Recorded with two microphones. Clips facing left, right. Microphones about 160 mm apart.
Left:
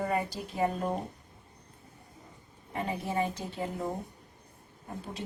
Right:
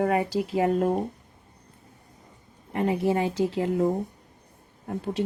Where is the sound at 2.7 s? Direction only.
90° right.